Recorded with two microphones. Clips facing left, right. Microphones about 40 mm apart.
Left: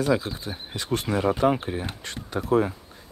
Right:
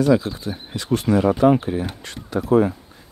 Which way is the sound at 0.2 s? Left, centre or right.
Centre.